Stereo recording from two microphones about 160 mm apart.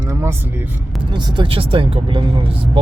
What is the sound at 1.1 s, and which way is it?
Speech, 30° right (ahead or behind).